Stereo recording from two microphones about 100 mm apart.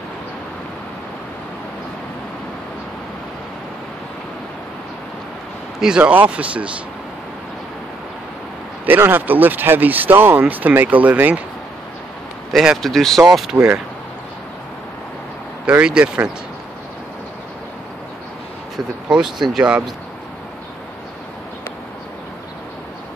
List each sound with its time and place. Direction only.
5.8 s speech: 10° right (ahead or behind)
8.8 s speech: 20° right (ahead or behind)
12.5 s speech: centre (ahead or behind)
15.8 s speech: 10° right (ahead or behind)
19.0 s speech: 10° right (ahead or behind)